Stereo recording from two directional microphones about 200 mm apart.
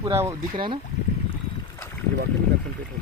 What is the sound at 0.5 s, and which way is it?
Speech, 25° right (ahead or behind).